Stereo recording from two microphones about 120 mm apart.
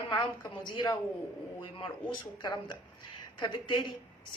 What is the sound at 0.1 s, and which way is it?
Speech, 40° left (ahead or behind).